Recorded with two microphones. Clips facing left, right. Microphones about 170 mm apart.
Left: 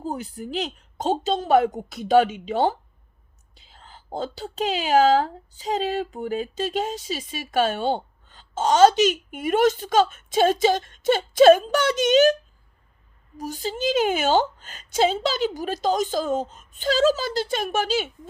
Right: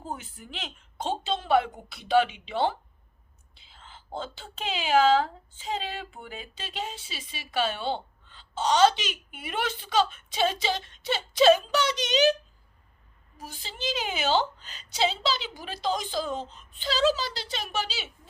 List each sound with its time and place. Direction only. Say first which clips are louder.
0.0 s a woman's voice: left 8 dB; 40° left (ahead or behind)